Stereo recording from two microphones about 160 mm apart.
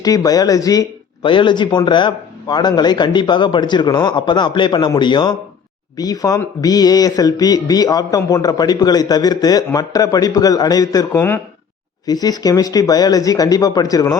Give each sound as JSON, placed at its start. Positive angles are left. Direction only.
{"t": 0.0, "sound": "a man's voice", "side_deg": 25}